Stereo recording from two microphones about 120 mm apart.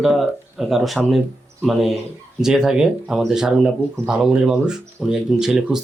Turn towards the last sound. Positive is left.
turn(degrees=-5)  # may be behind; listen again after turning